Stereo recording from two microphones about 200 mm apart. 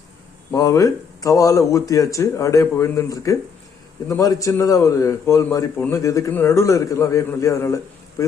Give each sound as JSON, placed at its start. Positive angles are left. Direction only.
{"t": 0.5, "sound": "a man's voice", "side_deg": 15}